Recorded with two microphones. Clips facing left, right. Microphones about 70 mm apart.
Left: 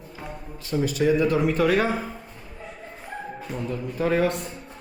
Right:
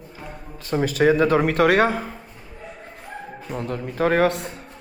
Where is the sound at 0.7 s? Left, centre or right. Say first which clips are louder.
Right 3 dB; right.